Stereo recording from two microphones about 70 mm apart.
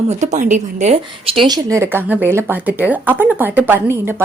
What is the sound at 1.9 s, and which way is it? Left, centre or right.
Speech, right.